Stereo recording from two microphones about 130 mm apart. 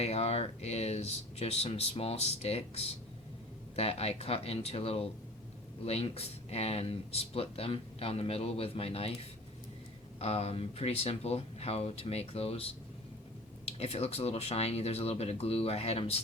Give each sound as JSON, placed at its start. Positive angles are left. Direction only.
{"t": 0.0, "sound": "speech", "side_deg": 55}
{"t": 10.2, "sound": "speech", "side_deg": 50}